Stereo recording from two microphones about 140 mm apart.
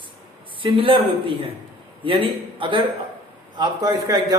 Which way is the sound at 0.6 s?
35° right (ahead or behind).